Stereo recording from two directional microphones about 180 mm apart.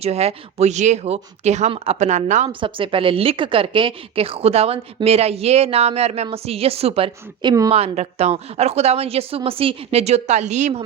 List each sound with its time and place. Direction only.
0.0 s a woman's voice: 35° right (ahead or behind)
2.5 s a woman's voice: 30° right (ahead or behind)